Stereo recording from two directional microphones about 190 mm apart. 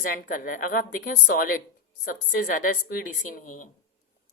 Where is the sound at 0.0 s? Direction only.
45° left (ahead or behind).